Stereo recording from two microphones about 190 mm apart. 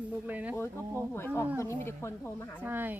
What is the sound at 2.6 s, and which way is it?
Speech, 10° right (ahead or behind).